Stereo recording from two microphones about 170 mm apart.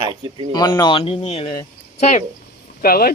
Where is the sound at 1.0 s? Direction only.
40° left (ahead or behind).